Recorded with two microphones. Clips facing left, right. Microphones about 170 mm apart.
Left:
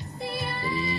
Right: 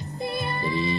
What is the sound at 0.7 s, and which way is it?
Speech, 5° left (ahead or behind).